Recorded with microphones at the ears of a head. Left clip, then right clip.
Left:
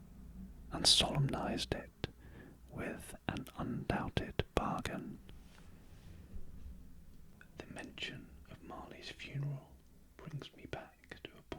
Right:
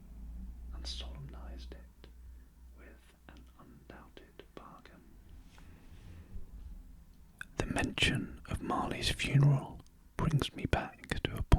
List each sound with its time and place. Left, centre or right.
0.7 s speech: left
7.3 s speech: right